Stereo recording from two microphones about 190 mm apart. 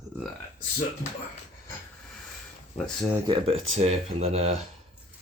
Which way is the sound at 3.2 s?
30° right (ahead or behind).